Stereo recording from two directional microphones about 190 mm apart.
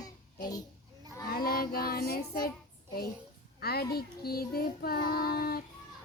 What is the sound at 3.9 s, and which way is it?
Female singing, 55° left (ahead or behind).